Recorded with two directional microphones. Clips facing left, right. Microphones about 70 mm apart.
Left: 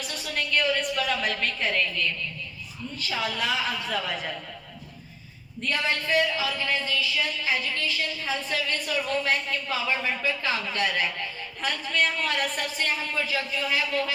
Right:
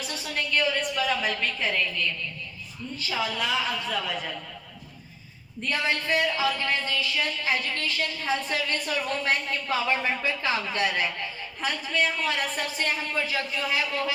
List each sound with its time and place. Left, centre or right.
0.6 s a woman's voice: centre
3.3 s a woman's voice: centre
5.6 s a man's voice: right
11.6 s a woman's voice: centre
12.8 s speech: right